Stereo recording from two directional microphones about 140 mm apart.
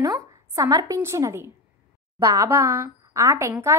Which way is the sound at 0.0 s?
25° right (ahead or behind).